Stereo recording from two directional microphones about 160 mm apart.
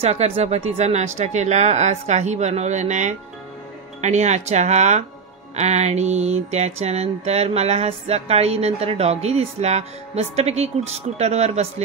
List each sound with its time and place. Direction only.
0.0 s speech: 45° right (ahead or behind)
5.6 s mantra: 45° right (ahead or behind)